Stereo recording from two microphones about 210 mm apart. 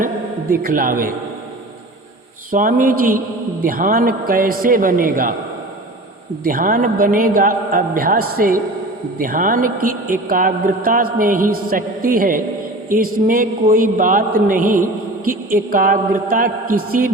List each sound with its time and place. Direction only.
0.5 s a man's voice: 40° right (ahead or behind)
2.5 s a man's voice: 40° right (ahead or behind)
6.4 s a man's voice: 40° right (ahead or behind)